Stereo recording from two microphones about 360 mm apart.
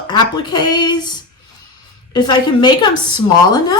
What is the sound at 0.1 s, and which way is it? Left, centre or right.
Speech, centre.